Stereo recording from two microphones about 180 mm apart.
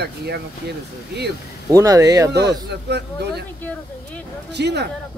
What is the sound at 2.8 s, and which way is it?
Speech, 65° right (ahead or behind).